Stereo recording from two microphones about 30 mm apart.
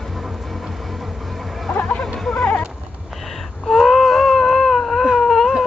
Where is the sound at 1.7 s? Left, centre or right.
Left.